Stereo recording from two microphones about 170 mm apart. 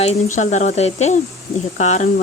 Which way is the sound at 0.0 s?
40° left (ahead or behind).